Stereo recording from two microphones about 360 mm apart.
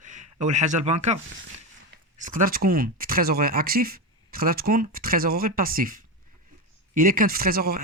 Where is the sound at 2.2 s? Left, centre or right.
Right.